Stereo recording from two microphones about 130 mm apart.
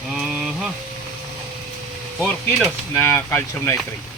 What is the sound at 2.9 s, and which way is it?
Speech, 20° left (ahead or behind).